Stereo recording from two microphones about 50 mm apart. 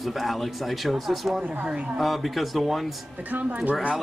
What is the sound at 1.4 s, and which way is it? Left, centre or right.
Speech, right.